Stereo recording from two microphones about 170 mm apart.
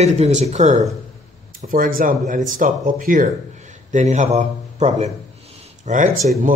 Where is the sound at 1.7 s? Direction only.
55° right (ahead or behind).